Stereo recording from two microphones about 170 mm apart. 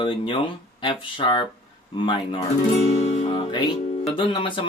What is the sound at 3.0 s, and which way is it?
Music, 45° left (ahead or behind).